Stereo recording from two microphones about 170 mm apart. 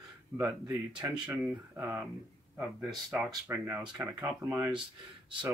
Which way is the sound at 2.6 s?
5° right (ahead or behind).